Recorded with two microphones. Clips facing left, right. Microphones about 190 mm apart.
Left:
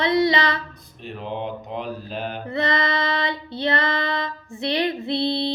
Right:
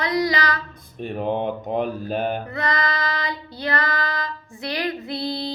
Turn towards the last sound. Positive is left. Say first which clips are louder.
# left 4 dB
turn(degrees=25)  # may be behind; listen again after turning